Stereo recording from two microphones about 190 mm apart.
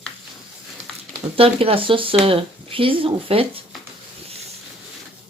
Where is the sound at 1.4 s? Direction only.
30° right (ahead or behind).